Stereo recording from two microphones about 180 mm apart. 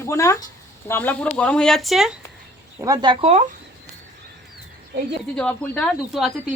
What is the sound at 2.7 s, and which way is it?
Speech, 20° right (ahead or behind).